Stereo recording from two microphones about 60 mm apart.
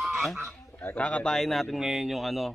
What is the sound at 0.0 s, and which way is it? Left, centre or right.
Honk, centre.